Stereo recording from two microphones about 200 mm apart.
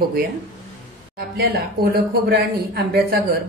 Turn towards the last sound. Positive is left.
turn(degrees=-50)  # may be behind; listen again after turning